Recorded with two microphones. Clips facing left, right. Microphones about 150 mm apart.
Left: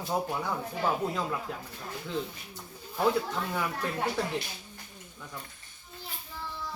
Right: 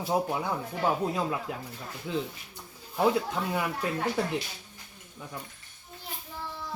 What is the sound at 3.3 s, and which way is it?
Speech, 15° right (ahead or behind).